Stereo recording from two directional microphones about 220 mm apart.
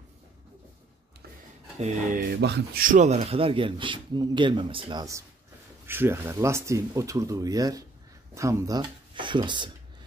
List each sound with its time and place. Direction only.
1.8 s speech: 35° right (ahead or behind); by 9.7 s 20° right (ahead or behind)